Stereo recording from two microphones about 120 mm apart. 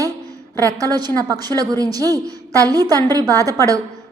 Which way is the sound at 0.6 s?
30° right (ahead or behind).